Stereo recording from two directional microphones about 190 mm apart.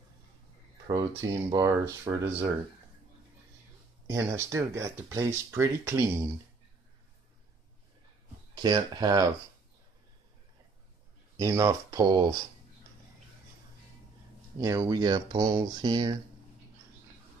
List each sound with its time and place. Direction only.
0.8 s speech: 20° right (ahead or behind)
4.1 s speech: 15° right (ahead or behind)
8.6 s speech: 20° right (ahead or behind)
11.3 s speech: 15° right (ahead or behind)
14.6 s speech: 20° right (ahead or behind)